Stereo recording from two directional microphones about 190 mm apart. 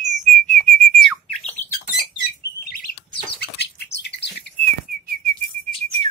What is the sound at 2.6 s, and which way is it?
Bird, 50° left (ahead or behind).